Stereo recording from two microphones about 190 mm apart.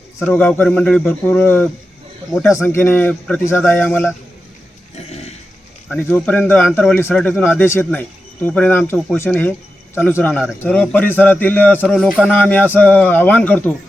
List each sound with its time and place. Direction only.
0.3 s speech: 10° left (ahead or behind)
4.9 s a sound: 35° left (ahead or behind)
5.9 s speech: 10° left (ahead or behind)